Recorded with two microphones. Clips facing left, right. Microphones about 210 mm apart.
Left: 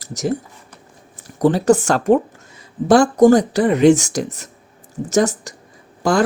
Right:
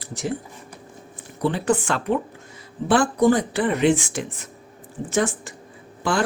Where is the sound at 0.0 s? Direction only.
40° left (ahead or behind).